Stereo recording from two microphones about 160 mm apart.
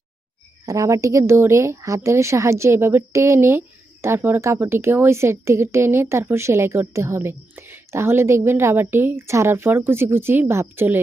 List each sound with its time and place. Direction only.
0.6 s a woman's voice: 20° right (ahead or behind)